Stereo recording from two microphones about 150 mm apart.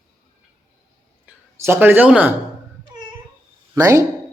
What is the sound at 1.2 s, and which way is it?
Speech, 15° right (ahead or behind).